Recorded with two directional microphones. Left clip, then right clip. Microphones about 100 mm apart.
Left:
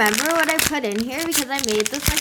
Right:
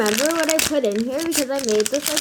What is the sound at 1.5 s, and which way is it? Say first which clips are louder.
Speech: right 3 dB; 35° left (ahead or behind).